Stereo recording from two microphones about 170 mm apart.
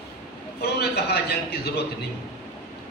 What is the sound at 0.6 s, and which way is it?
A man's voice, 70° left (ahead or behind).